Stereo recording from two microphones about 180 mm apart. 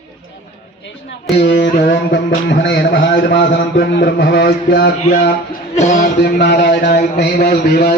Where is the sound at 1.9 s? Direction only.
65° left (ahead or behind).